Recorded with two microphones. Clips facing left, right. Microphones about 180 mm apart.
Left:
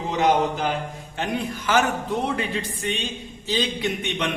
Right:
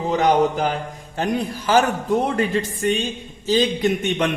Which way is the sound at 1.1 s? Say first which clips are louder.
Right 4 dB; 40° right (ahead or behind).